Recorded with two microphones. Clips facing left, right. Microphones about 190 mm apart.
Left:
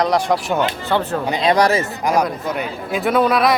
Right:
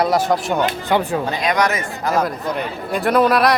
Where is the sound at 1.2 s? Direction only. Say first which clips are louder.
Left 2 dB; 20° left (ahead or behind).